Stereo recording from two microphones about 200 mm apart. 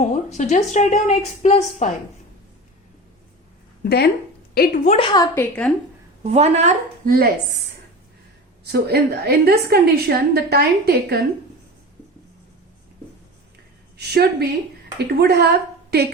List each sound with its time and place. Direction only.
0.0 s a woman's voice: 35° left (ahead or behind)
3.8 s a woman's voice: 50° left (ahead or behind)
4.9 s a woman's voice: 20° left (ahead or behind)
6.3 s speech: 35° right (ahead or behind)
8.6 s a woman's voice: 55° right (ahead or behind)
14.1 s a woman's voice: 50° right (ahead or behind)